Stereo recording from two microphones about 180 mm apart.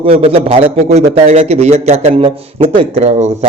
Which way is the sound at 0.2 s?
35° right (ahead or behind).